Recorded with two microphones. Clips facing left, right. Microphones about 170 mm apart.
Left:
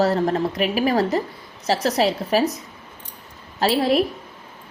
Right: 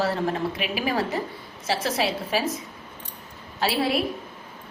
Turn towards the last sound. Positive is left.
turn(degrees=40)  # may be behind; listen again after turning